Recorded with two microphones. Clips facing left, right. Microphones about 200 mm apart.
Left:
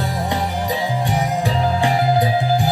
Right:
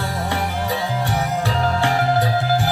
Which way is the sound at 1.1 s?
15° left (ahead or behind).